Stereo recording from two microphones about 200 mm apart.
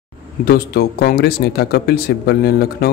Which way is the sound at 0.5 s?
50° left (ahead or behind).